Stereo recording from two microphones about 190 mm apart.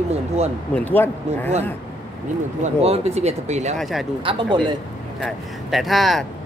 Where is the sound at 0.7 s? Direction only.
10° left (ahead or behind).